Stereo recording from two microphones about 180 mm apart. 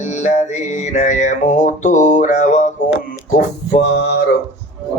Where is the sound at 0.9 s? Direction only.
40° left (ahead or behind).